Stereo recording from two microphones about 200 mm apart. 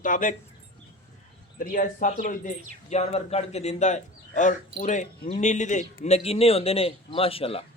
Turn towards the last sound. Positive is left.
turn(degrees=30)  # may be behind; listen again after turning